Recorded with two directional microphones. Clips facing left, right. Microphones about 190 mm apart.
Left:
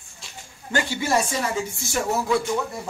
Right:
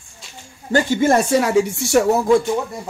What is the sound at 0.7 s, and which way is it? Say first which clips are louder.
Speech: right 8 dB; 45° right (ahead or behind).